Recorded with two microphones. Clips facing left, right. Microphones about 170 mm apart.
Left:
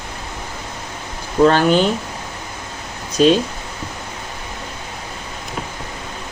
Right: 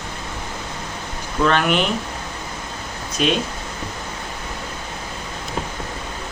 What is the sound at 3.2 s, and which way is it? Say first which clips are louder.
Speech: left 8 dB; 35° left (ahead or behind).